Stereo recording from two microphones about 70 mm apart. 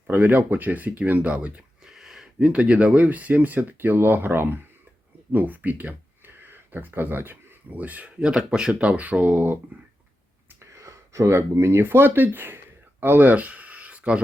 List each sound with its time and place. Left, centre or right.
0.1 s speech: right
1.8 s speech: centre; by 8.1 s right
8.2 s speech: centre
10.8 s speech: right
13.0 s a sound: right